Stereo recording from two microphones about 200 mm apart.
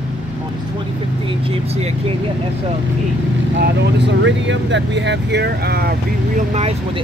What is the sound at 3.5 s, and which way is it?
Speech, 60° right (ahead or behind).